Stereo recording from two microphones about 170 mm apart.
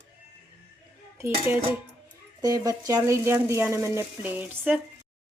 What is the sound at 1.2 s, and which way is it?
A woman's voice, 15° right (ahead or behind).